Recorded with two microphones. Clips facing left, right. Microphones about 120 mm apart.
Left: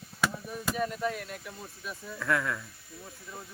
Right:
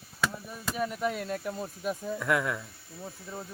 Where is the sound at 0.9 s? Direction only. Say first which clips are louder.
Right 1 dB; 15° right (ahead or behind).